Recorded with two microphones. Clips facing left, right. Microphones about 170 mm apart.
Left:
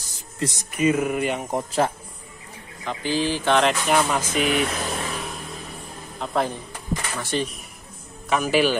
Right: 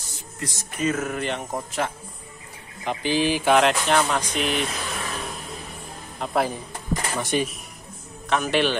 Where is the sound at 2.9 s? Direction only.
15° right (ahead or behind).